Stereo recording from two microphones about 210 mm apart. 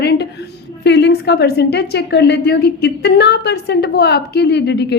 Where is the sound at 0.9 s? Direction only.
55° left (ahead or behind).